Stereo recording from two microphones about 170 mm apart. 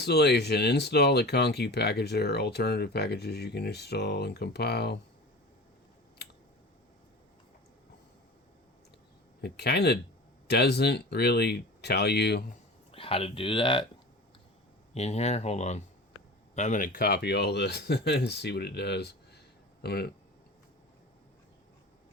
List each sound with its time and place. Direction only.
0.0 s speech: 75° left (ahead or behind)
9.4 s speech: 75° left (ahead or behind)
12.9 s speech: 35° left (ahead or behind)
14.9 s speech: 40° left (ahead or behind); by 20.1 s 70° left (ahead or behind)